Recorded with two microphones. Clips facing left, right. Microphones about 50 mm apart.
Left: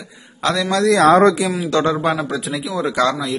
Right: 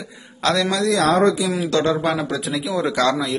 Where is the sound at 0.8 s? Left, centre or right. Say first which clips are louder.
Left 6 dB; left.